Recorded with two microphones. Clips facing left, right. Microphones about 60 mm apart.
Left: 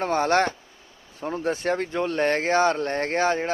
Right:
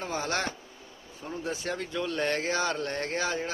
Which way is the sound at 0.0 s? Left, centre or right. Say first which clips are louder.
Left 10 dB; left.